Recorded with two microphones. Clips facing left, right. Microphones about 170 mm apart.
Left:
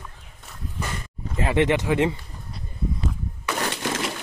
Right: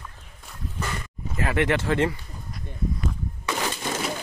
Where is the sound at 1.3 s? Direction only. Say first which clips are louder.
Left 3 dB; 20° left (ahead or behind).